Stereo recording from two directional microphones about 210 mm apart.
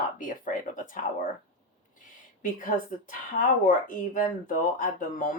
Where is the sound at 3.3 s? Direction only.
40° left (ahead or behind).